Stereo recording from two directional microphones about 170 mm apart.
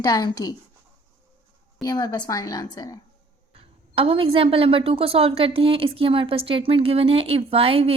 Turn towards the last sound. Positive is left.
turn(degrees=-35)  # may be behind; listen again after turning